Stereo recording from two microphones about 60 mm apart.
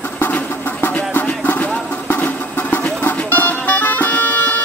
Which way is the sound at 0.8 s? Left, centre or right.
Left.